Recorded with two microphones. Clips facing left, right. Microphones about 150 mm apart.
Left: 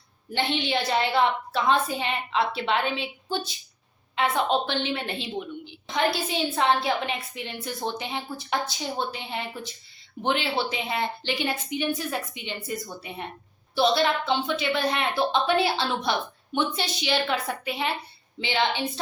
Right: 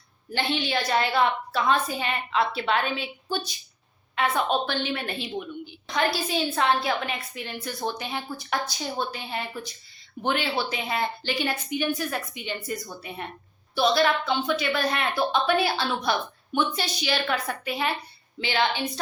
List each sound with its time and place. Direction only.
0.3 s a woman's voice: 20° left (ahead or behind)